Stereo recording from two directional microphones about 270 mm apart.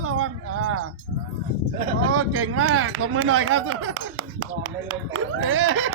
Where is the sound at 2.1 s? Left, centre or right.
Right.